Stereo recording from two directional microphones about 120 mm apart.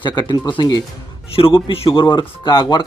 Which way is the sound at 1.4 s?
50° left (ahead or behind).